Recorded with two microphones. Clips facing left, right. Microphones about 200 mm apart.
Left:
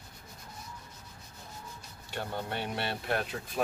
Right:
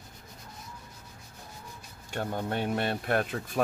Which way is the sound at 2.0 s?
45° right (ahead or behind).